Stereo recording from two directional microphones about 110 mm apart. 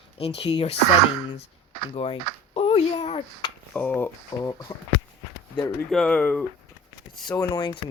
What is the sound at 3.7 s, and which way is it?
Speech, 15° left (ahead or behind).